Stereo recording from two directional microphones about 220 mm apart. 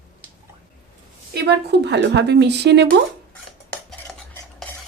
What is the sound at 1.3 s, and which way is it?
Speech, 50° right (ahead or behind).